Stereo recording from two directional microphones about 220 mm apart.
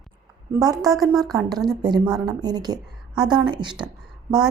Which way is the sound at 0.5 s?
15° right (ahead or behind).